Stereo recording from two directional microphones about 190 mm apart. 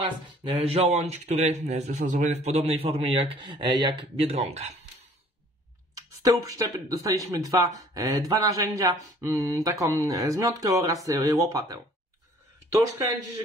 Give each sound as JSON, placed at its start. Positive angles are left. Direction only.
{"t": 0.4, "sound": "speech", "side_deg": -30}
{"t": 5.9, "sound": "speech", "side_deg": -15}